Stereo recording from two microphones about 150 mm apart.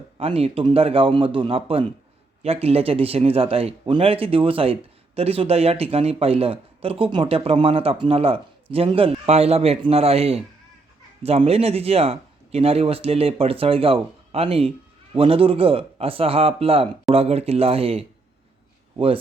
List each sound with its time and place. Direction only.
0.2 s speech: 40° right (ahead or behind)